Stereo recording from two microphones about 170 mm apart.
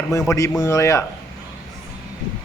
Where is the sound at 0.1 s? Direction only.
20° left (ahead or behind).